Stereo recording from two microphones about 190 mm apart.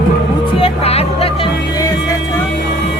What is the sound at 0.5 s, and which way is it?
Speech, 30° left (ahead or behind).